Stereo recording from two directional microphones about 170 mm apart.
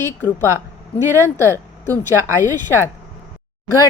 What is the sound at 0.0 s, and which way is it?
Speech, 15° left (ahead or behind).